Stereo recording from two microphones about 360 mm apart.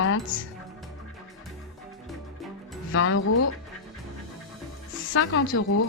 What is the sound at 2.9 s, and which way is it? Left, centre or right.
Speech, left.